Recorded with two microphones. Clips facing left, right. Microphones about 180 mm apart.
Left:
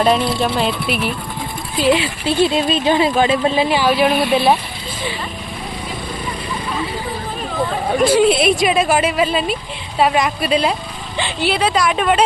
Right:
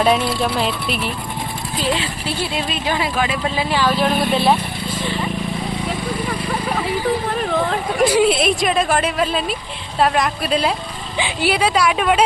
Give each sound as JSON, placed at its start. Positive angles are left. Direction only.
{"t": 0.0, "sound": "speech", "side_deg": 0}
{"t": 1.8, "sound": "speech", "side_deg": 15}
{"t": 7.3, "sound": "vehicle", "side_deg": -70}
{"t": 8.2, "sound": "a woman's voice", "side_deg": 0}